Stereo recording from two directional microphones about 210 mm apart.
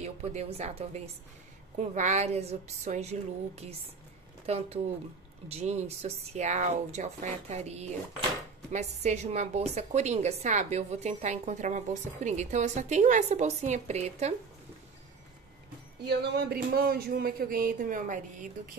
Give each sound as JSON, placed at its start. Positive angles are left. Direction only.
{"t": 0.0, "sound": "a woman's voice", "side_deg": -30}
{"t": 16.0, "sound": "speech", "side_deg": -50}